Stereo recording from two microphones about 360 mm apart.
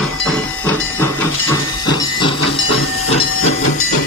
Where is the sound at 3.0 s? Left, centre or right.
Centre.